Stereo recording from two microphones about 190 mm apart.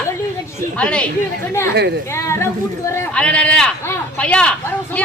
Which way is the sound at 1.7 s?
60° right (ahead or behind).